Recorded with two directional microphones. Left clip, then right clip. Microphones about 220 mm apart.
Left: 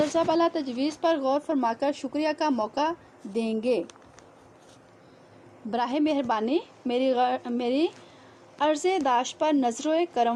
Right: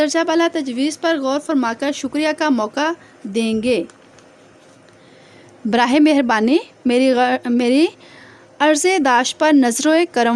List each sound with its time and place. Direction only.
0.0 s a woman's voice: 35° right (ahead or behind)
5.7 s a woman's voice: 45° right (ahead or behind)